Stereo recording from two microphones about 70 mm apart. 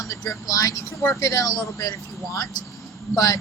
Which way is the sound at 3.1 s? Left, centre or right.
Left.